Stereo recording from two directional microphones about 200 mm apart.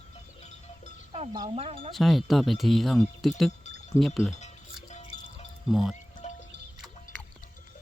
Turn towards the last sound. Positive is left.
turn(degrees=35)  # may be behind; listen again after turning